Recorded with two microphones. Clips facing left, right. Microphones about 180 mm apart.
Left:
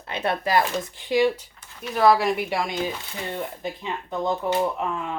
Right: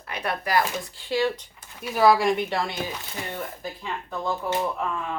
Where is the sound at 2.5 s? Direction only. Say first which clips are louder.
Left 2 dB; 15° left (ahead or behind).